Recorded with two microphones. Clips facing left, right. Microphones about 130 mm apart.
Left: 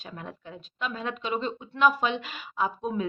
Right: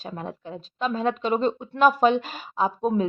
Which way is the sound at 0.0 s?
35° right (ahead or behind).